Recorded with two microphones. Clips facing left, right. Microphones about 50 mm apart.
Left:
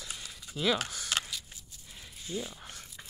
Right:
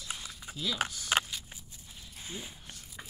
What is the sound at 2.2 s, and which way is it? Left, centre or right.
Speech, right.